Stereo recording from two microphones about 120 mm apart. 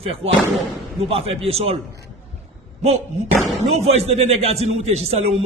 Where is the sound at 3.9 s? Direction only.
60° right (ahead or behind).